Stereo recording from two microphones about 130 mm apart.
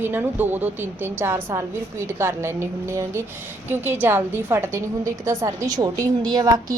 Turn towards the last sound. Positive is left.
turn(degrees=-30)  # may be behind; listen again after turning